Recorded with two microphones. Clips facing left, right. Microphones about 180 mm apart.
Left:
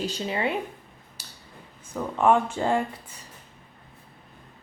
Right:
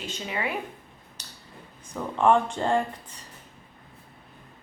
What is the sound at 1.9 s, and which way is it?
Speech, 5° left (ahead or behind).